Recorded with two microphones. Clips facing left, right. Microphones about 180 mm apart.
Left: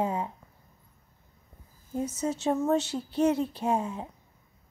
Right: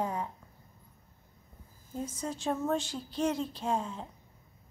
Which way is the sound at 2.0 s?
75° left (ahead or behind).